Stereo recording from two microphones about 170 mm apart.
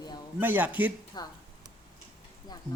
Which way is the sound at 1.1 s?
25° left (ahead or behind).